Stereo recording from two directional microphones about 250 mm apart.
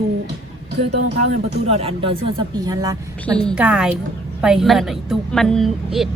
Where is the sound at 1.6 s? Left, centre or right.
Right.